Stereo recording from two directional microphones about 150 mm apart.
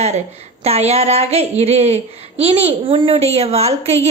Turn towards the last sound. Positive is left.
turn(degrees=-45)  # may be behind; listen again after turning